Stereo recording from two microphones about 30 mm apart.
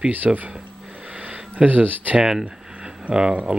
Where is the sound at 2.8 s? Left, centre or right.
Right.